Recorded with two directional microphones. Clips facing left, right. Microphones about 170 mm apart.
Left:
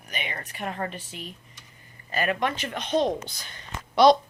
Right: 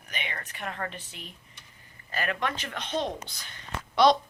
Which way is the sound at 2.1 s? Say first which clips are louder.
Left 4 dB; 15° left (ahead or behind).